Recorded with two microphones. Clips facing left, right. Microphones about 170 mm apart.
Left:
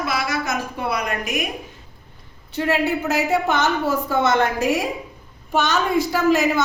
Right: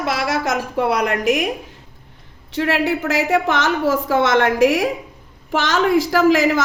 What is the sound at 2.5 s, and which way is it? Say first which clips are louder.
A woman's voice: right 2 dB; 90° right.